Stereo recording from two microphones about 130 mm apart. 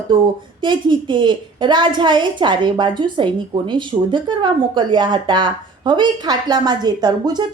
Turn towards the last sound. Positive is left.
turn(degrees=-30)  # may be behind; listen again after turning